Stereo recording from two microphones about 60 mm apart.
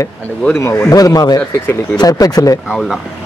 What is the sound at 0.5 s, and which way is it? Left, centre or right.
Speech, left.